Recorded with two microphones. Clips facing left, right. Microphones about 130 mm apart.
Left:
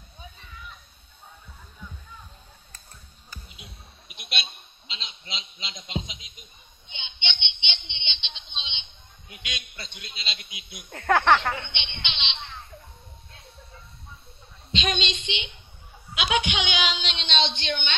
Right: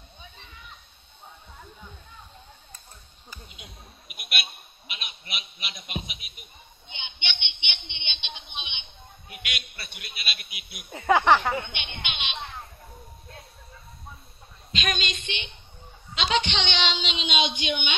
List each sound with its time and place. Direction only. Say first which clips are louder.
0.5 s a sound: left 3 dB; 40° right (ahead or behind)
3.4 s basketball bounce: right 1 dB; 35° left (ahead or behind)
4.2 s a sound: even; 25° left (ahead or behind)
9.3 s a sound: right 1 dB; 20° left (ahead or behind)
10.0 s a man's voice: right 3 dB; 20° left (ahead or behind)
10.9 s speech: right 1 dB; 10° right (ahead or behind)
11.7 s a man's voice: right 1 dB; 25° left (ahead or behind)
14.7 s a woman's voice: left 2 dB; 25° left (ahead or behind)
16.2 s a woman's voice: even; 5° left (ahead or behind); by 17.9 s 15° right (ahead or behind)